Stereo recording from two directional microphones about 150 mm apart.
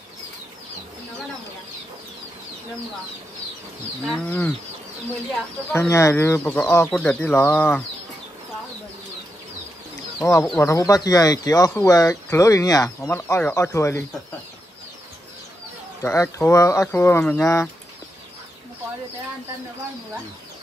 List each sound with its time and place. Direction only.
4.0 s speech: 10° left (ahead or behind)
5.7 s speech: 20° left (ahead or behind)
10.6 s speech: 20° left (ahead or behind)
16.0 s speech: 20° left (ahead or behind)